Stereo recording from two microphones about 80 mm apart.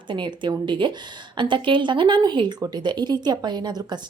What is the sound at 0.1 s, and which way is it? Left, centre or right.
Speech, right.